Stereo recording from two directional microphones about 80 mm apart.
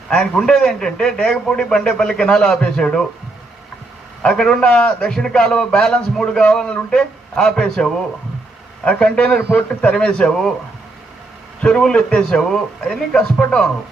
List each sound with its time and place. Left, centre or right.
0.1 s a man's voice: centre
4.2 s a man's voice: centre
11.6 s a man's voice: centre